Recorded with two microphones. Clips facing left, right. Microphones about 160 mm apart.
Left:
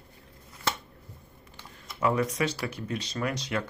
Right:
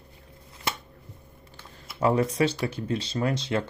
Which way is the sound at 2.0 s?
30° right (ahead or behind).